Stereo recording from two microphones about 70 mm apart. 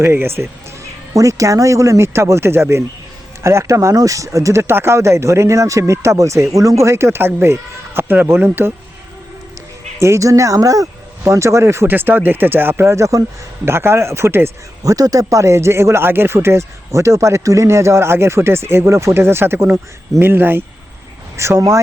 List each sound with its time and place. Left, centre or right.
0.0 s speech: right
1.1 s speech: right
10.0 s speech: right
11.2 s speech: right
14.8 s speech: right